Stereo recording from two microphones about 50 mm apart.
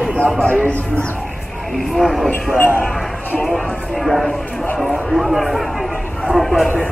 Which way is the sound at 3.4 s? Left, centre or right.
Centre.